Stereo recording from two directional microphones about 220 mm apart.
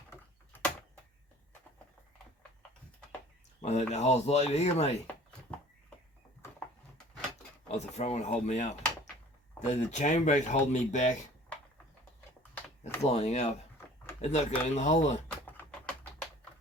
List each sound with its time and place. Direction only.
3.6 s speech: 30° left (ahead or behind)
7.7 s speech: 30° left (ahead or behind)
13.0 s speech: 30° left (ahead or behind)
15.4 s typing: 10° left (ahead or behind)